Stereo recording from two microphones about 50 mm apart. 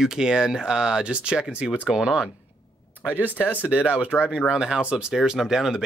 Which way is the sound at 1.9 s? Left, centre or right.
Centre.